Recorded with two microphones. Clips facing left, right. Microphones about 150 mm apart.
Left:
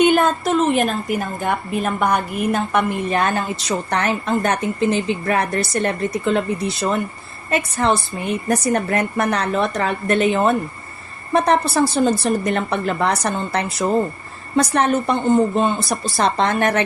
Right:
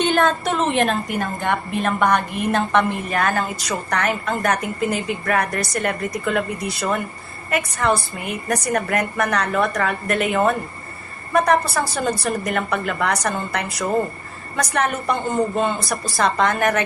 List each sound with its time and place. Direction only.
0.0 s a woman's voice: 10° left (ahead or behind)
3.1 s a woman's voice: 25° left (ahead or behind)